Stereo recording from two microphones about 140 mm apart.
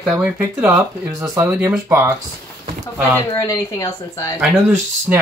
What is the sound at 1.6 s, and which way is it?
Speech, 20° right (ahead or behind).